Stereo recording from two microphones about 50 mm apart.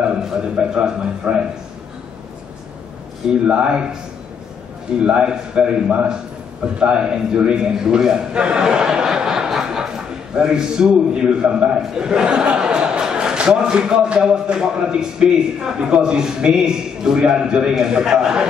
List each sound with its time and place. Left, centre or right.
0.4 s a man's voice: centre
3.4 s a man's voice: centre
5.0 s a man's voice: centre